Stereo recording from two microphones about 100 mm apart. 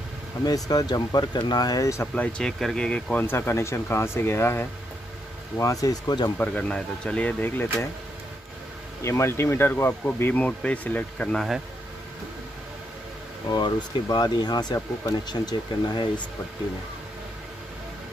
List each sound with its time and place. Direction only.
0.5 s speech: 40° left (ahead or behind)
2.1 s speech: 10° left (ahead or behind)
5.6 s speech: 35° left (ahead or behind)
6.3 s speech: 15° left (ahead or behind)
9.0 s speech: 30° left (ahead or behind)
13.5 s speech: 45° left (ahead or behind)